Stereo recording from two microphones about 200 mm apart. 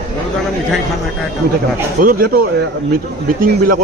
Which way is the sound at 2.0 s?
45° right (ahead or behind).